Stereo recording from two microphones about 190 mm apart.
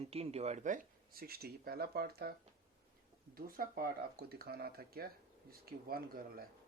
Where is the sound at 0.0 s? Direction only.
30° right (ahead or behind); by 2.3 s 55° right (ahead or behind).